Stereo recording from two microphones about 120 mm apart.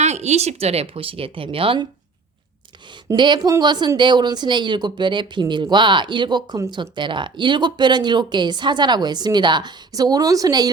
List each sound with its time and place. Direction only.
0.0 s speech: 65° right (ahead or behind); by 1.9 s 45° right (ahead or behind)
3.2 s speech: 40° right (ahead or behind)